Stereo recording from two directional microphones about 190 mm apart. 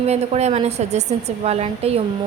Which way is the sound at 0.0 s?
35° right (ahead or behind).